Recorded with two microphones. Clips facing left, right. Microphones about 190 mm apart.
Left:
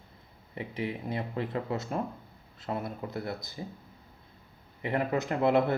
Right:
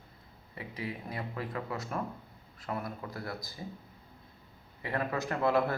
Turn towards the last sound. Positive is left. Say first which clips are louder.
# left 3 dB
turn(degrees=20)  # may be behind; listen again after turning